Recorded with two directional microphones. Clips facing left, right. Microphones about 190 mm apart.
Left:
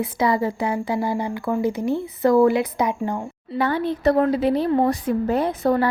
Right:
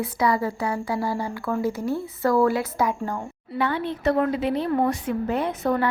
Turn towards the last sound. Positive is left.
turn(degrees=35)  # may be behind; listen again after turning